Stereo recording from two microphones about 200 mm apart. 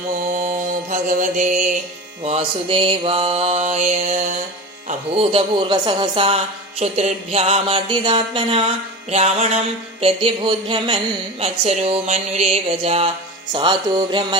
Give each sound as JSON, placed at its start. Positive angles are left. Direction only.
{"t": 0.4, "sound": "mantra", "side_deg": -40}
{"t": 2.2, "sound": "a man's voice", "side_deg": -30}